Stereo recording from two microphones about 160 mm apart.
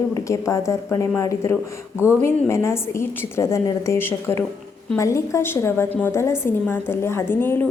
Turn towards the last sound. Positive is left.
turn(degrees=10)  # may be behind; listen again after turning